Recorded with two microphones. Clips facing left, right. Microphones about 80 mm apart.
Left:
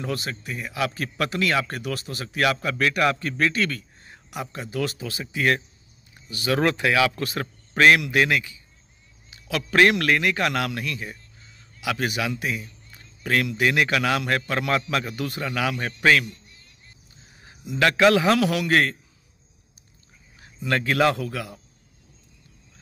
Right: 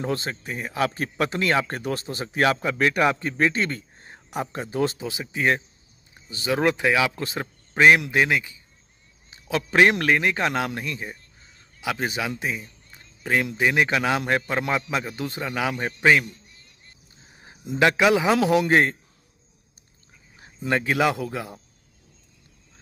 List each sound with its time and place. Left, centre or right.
0.0 s a man's voice: right
9.3 s a man's voice: right
17.4 s a sound: right
18.0 s a man's voice: centre
20.3 s a man's voice: right